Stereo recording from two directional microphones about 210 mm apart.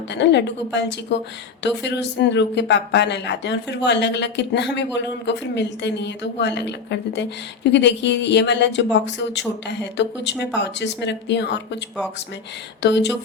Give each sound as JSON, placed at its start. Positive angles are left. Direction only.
{"t": 0.1, "sound": "speech", "side_deg": 55}
{"t": 12.8, "sound": "speech", "side_deg": 55}